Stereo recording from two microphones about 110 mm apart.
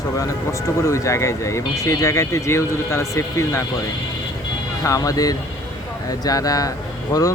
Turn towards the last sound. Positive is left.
turn(degrees=35)  # may be behind; listen again after turning